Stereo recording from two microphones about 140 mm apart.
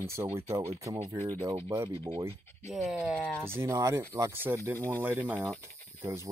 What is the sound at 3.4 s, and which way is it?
Speech, 20° right (ahead or behind).